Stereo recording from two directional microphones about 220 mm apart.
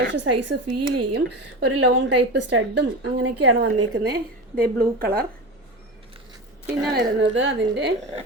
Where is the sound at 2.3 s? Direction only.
55° right (ahead or behind).